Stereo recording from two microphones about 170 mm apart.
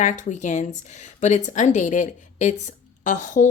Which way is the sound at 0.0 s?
45° left (ahead or behind).